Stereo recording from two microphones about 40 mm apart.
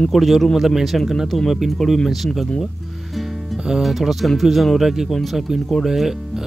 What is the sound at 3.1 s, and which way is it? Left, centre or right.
Music, centre.